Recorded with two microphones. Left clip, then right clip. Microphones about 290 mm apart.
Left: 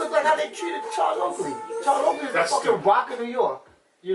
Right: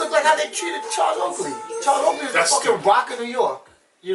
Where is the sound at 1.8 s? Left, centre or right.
Centre.